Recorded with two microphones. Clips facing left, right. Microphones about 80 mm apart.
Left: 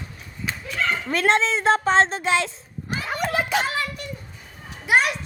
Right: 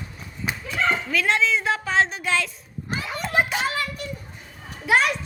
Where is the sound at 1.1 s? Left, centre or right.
Left.